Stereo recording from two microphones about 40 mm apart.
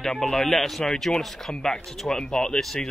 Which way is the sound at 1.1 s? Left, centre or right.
Centre.